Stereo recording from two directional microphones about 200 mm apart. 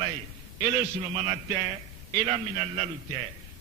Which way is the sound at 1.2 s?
30° right (ahead or behind).